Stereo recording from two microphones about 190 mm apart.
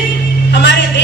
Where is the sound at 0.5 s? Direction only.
65° left (ahead or behind).